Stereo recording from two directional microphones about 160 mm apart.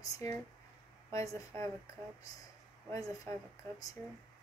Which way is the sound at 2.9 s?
20° left (ahead or behind).